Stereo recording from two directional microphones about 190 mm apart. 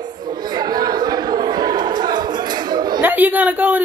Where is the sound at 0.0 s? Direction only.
20° right (ahead or behind).